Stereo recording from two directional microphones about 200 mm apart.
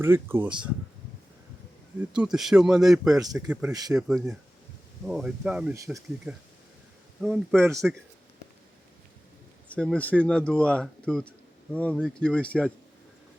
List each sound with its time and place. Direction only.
0.0 s speech: 10° right (ahead or behind)
2.1 s speech: 5° right (ahead or behind)
3.2 s speech: 20° right (ahead or behind)
3.4 s speech: 5° right (ahead or behind)
3.7 s speech: 20° right (ahead or behind)
3.9 s speech: centre (ahead or behind)
7.2 s speech: centre (ahead or behind)
9.7 s speech: 5° left (ahead or behind)
11.9 s speech: 5° right (ahead or behind)